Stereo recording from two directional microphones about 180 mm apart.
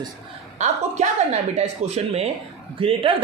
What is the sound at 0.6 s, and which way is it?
Speech, 40° right (ahead or behind).